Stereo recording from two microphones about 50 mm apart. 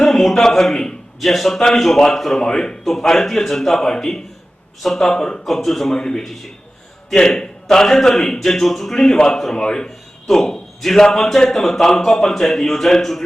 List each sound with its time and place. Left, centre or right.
0.0 s a man's voice: centre
9.1 s a man's voice: centre